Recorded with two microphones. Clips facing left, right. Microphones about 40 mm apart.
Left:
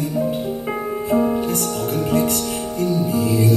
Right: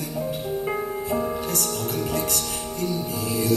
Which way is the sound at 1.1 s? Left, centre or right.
Left.